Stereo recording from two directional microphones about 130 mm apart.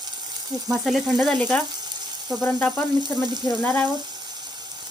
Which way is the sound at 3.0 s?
35° right (ahead or behind).